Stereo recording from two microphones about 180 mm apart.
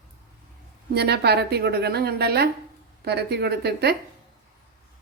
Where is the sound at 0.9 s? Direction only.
65° right (ahead or behind).